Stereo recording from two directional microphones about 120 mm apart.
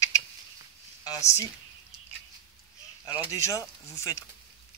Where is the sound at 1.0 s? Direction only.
30° left (ahead or behind).